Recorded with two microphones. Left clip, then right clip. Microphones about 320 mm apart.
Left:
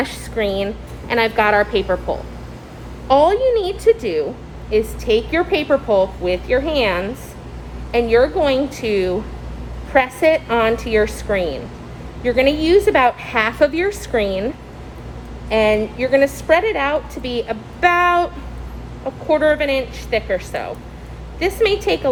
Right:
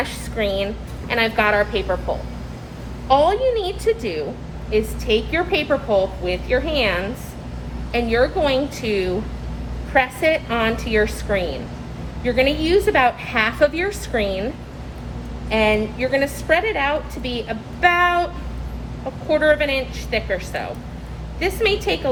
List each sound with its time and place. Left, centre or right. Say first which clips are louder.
0.0 s a woman's voice: left 2 dB; left
19.3 s a woman's voice: left 1 dB; left